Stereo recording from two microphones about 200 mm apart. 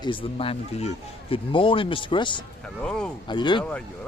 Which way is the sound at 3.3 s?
25° left (ahead or behind).